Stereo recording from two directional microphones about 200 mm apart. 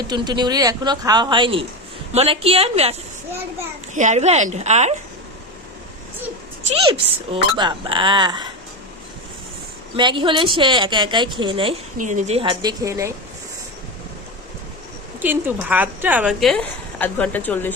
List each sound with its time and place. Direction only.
0.1 s a woman's voice: 20° right (ahead or behind)
3.9 s a child's voice: 35° right (ahead or behind)
7.3 s a woman's voice: 25° right (ahead or behind)
9.9 s a woman's voice: 25° right (ahead or behind)
11.9 s a woman's voice: 40° right (ahead or behind); by 13.1 s 15° right (ahead or behind)
15.2 s a woman's voice: 10° right (ahead or behind); by 17.7 s 10° left (ahead or behind)